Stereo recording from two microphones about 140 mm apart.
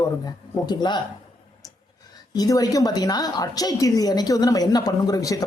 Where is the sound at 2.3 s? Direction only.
25° left (ahead or behind).